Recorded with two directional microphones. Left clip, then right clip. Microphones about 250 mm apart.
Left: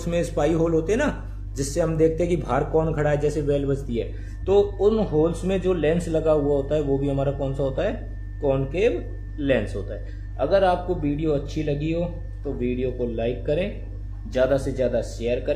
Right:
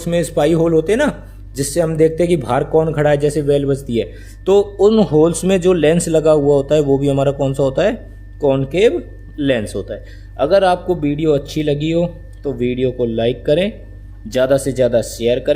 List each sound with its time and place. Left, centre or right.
0.0 s speech: right